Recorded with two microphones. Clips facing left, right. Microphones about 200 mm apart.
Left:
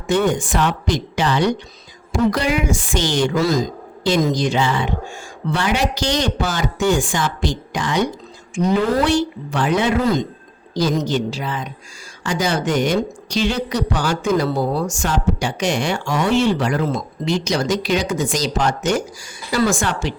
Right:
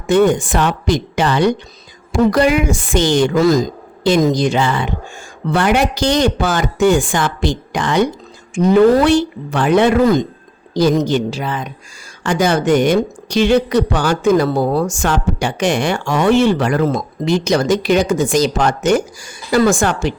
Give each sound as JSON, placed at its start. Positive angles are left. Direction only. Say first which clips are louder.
{"t": 0.1, "sound": "a woman's voice", "louder": "right 5 dB", "side_deg": -55}